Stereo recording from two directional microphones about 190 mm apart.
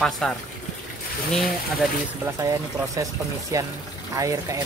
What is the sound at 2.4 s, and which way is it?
Speech, 15° right (ahead or behind).